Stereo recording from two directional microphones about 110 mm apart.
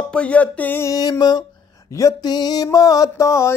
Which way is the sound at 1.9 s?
30° left (ahead or behind).